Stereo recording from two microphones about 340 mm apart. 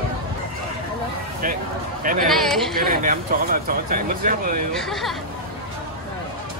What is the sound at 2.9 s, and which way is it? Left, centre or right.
Speech, right.